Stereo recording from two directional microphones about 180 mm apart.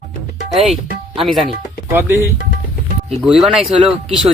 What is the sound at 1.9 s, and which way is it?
Speech, 15° right (ahead or behind).